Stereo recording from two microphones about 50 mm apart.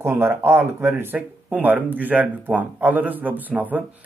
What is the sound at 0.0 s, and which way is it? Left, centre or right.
Speech, right.